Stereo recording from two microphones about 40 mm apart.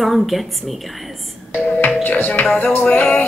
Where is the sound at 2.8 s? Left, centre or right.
Left.